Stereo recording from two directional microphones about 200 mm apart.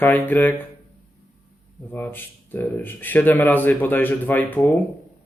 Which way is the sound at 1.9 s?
10° left (ahead or behind).